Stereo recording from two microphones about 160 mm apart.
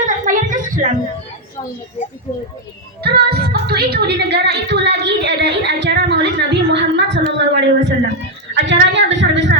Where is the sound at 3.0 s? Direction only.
85° right.